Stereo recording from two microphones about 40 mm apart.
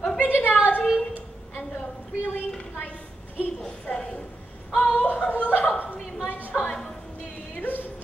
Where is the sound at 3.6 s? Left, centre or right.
Left.